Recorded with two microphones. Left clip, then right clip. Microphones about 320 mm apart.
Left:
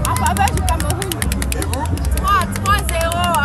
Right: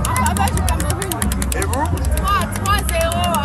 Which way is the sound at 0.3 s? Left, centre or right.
Centre.